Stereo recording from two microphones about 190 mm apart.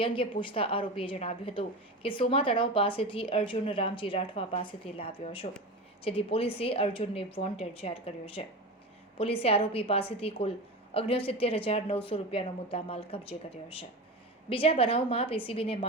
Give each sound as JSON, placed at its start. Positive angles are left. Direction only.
{"t": 0.0, "sound": "a woman's voice", "side_deg": 25}
{"t": 14.5, "sound": "a woman's voice", "side_deg": 30}